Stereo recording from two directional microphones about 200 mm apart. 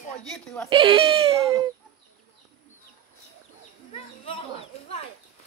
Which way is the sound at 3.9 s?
30° left (ahead or behind).